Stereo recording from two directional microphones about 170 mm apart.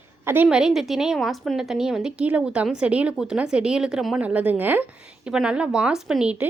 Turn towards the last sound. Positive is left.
turn(degrees=-5)  # may be behind; listen again after turning